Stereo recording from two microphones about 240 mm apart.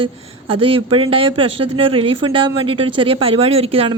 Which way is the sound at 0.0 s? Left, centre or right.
Right.